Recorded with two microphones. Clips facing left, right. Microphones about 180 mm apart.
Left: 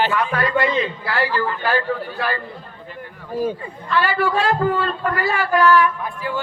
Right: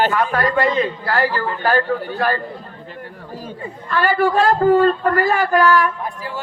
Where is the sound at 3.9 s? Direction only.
45° right (ahead or behind).